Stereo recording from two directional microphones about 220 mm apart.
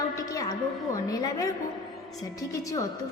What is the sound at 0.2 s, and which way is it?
Music, 15° left (ahead or behind).